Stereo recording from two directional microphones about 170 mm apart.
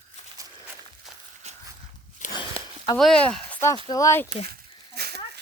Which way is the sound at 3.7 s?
20° left (ahead or behind).